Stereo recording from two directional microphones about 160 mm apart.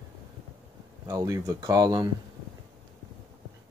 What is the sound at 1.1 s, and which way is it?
Speech, 20° right (ahead or behind).